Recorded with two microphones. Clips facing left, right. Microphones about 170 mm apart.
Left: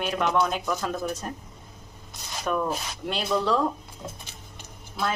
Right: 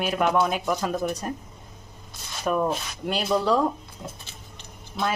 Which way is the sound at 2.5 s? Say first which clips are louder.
Right 2 dB; 15° right (ahead or behind).